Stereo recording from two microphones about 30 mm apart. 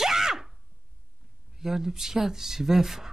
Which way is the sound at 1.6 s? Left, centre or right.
Centre.